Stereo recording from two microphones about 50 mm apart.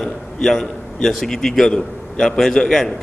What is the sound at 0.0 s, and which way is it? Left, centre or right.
A man's voice, centre.